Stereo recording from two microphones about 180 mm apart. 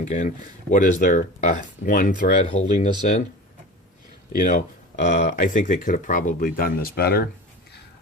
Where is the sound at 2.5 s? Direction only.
40° left (ahead or behind).